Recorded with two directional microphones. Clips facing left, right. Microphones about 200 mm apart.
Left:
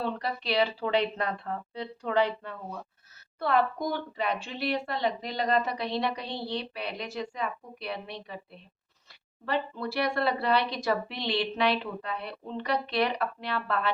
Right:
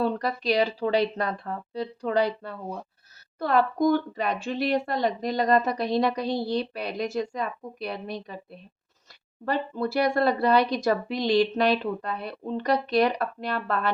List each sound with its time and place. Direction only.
0.0 s speech: 45° right (ahead or behind)
9.5 s speech: 45° right (ahead or behind)